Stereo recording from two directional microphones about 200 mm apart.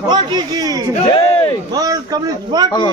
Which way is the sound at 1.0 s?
30° left (ahead or behind).